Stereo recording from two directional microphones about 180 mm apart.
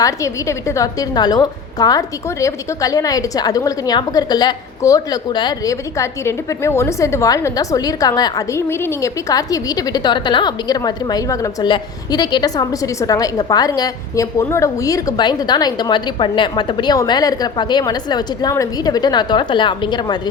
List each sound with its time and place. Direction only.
0.0 s a woman's voice: 15° left (ahead or behind)